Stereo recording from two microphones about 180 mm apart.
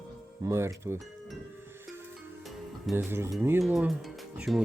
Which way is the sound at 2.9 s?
15° right (ahead or behind).